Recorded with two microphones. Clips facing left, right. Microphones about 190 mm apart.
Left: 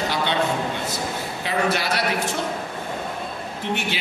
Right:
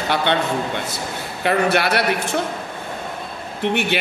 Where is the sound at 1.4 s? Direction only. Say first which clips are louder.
Right 6 dB; 65° right (ahead or behind).